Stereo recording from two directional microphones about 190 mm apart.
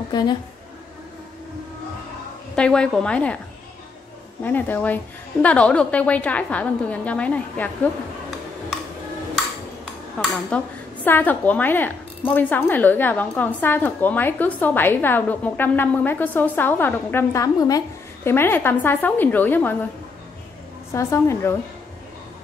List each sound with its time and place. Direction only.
0.1 s a woman's voice: 20° left (ahead or behind)
2.5 s a woman's voice: 5° left (ahead or behind)
4.4 s a woman's voice: 10° left (ahead or behind)
10.5 s a woman's voice: 5° left (ahead or behind)
20.9 s a woman's voice: 15° left (ahead or behind)